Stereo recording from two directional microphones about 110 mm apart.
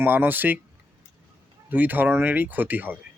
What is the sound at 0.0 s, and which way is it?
Speech, 15° right (ahead or behind).